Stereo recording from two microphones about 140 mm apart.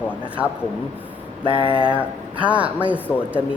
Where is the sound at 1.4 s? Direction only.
40° left (ahead or behind).